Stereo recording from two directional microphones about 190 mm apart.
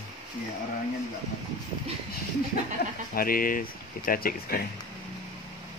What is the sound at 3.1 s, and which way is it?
Speech, 50° left (ahead or behind).